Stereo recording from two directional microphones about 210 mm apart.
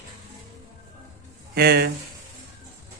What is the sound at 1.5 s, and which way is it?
Speech, 50° right (ahead or behind).